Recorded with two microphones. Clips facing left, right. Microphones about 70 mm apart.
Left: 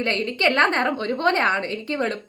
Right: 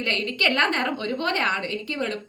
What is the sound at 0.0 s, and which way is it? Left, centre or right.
A woman's voice, left.